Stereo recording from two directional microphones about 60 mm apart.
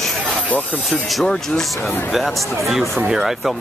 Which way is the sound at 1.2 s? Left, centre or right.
Centre.